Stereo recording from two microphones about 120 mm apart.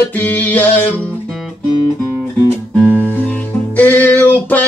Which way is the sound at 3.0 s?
15° left (ahead or behind).